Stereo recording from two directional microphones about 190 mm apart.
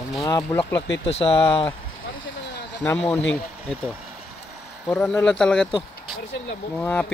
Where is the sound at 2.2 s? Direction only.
70° left (ahead or behind).